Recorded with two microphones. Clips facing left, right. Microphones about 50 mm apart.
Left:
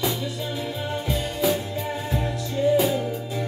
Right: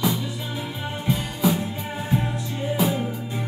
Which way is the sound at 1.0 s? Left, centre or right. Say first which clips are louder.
Right 2 dB; centre.